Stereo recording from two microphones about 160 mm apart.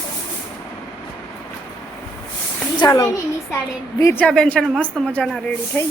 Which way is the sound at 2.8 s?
25° left (ahead or behind).